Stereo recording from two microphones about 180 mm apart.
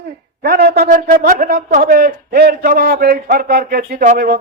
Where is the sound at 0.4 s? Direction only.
60° right (ahead or behind).